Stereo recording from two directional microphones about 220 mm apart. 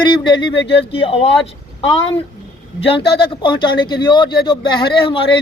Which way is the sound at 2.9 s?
20° left (ahead or behind).